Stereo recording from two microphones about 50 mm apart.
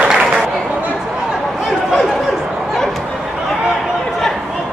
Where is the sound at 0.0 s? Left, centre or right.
Centre.